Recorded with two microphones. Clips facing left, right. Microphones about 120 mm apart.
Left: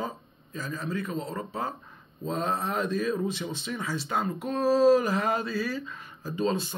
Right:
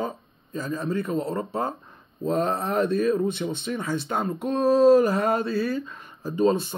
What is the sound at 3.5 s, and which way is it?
Speech, 55° right (ahead or behind).